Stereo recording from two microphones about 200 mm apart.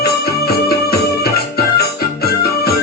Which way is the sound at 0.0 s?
50° left (ahead or behind).